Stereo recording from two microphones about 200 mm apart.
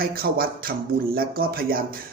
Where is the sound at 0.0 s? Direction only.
45° right (ahead or behind).